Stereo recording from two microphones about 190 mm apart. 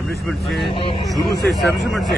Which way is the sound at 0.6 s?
30° left (ahead or behind).